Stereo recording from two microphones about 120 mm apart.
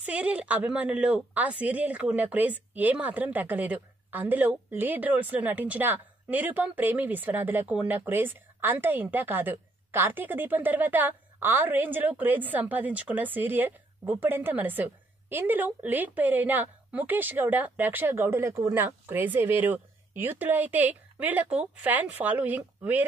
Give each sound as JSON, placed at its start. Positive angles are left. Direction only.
{"t": 0.0, "sound": "speech", "side_deg": -10}